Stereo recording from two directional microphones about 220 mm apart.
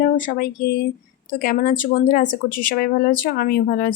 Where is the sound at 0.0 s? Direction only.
40° left (ahead or behind).